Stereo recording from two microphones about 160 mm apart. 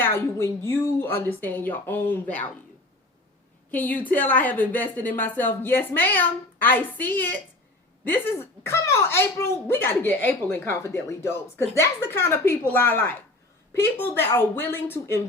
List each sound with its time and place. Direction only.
0.0 s speech: 15° left (ahead or behind)
3.7 s speech: 10° left (ahead or behind)